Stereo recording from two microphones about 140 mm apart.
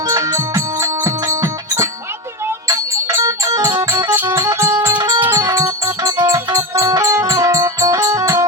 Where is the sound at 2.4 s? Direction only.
20° right (ahead or behind).